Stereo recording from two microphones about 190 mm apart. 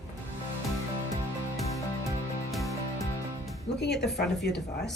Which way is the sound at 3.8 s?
60° left (ahead or behind).